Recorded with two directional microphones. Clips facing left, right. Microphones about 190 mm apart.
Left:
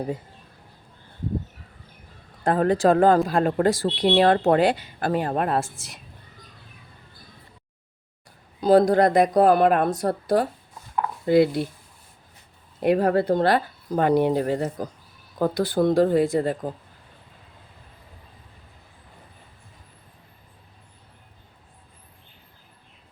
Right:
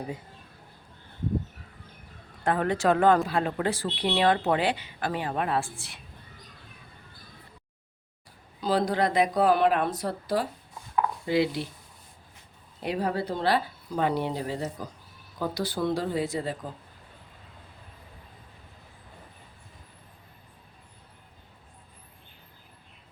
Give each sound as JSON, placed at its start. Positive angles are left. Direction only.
{"t": 2.4, "sound": "speech", "side_deg": 35}
{"t": 3.2, "sound": "speech", "side_deg": 45}
{"t": 8.6, "sound": "speech", "side_deg": 45}
{"t": 12.8, "sound": "speech", "side_deg": 55}